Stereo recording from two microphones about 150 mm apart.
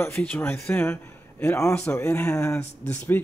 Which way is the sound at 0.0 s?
10° left (ahead or behind).